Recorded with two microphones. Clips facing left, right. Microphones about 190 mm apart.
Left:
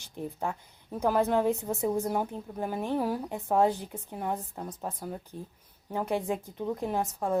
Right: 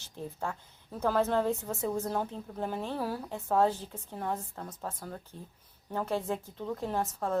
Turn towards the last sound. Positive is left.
turn(degrees=15)  # may be behind; listen again after turning